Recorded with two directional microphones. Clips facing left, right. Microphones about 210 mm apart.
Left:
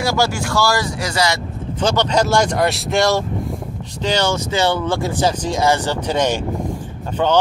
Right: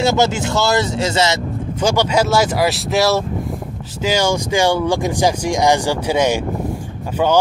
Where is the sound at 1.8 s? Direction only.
10° right (ahead or behind).